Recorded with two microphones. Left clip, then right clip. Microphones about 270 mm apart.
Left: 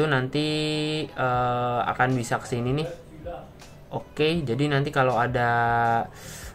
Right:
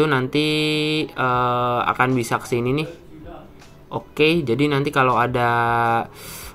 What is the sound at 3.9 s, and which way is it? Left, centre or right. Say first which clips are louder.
Mantra: right 6 dB; centre.